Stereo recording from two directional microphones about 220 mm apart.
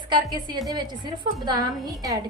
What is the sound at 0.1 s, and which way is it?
A woman's voice, 20° right (ahead or behind).